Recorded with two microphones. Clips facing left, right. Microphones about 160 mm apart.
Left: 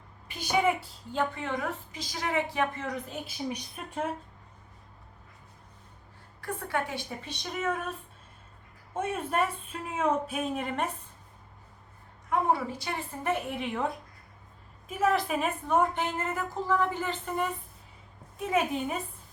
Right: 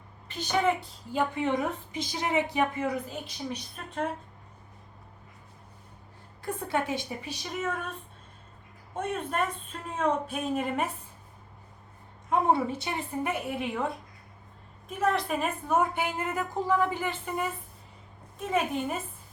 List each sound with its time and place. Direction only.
0.3 s speech: 10° left (ahead or behind)
1.1 s a woman's voice: 15° right (ahead or behind)
3.2 s speech: 10° left (ahead or behind)
6.4 s a woman's voice: 20° right (ahead or behind); by 7.9 s centre (ahead or behind)
8.9 s a woman's voice: 5° left (ahead or behind)
12.3 s a woman's voice: 25° right (ahead or behind)
13.2 s a woman's voice: 5° right (ahead or behind)